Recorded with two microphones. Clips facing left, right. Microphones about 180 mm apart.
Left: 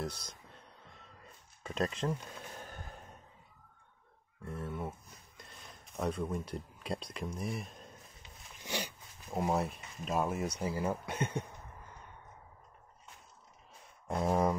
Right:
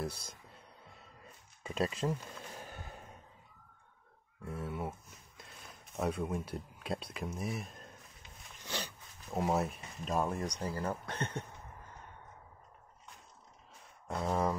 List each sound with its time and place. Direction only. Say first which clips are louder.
0.0 s speech: even; 10° right (ahead or behind)
1.6 s a sound: even; 5° right (ahead or behind)
4.4 s speech: even; 5° right (ahead or behind)
8.6 s dog: left 2 dB; 10° left (ahead or behind)
9.4 s speech: even; centre (ahead or behind)
14.1 s speech: left 3 dB; 15° left (ahead or behind)